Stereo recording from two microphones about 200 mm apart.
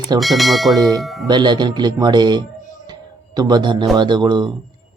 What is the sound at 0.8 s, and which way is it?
Speech, 20° right (ahead or behind).